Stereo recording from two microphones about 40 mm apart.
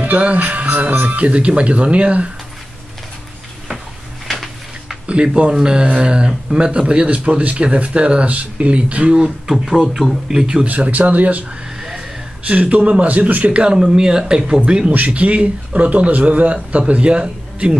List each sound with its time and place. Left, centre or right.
0.0 s speech: right
4.3 s a sound: centre
5.0 s speech: right
7.1 s speech: right; by 10.5 s centre
10.7 s a man's voice: right
12.4 s a man's voice: right
15.0 s a man's voice: right